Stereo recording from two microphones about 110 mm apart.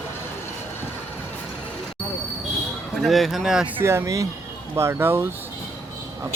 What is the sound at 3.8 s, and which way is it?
Speech, 25° right (ahead or behind).